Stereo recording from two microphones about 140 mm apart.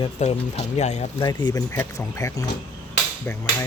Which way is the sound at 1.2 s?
20° left (ahead or behind).